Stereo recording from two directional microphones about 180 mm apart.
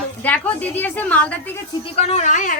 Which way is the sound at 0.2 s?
10° left (ahead or behind).